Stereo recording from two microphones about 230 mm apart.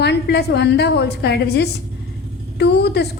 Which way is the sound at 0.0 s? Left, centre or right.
Left.